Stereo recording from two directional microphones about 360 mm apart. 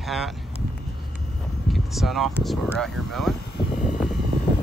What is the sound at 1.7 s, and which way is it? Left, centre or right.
Speech, centre.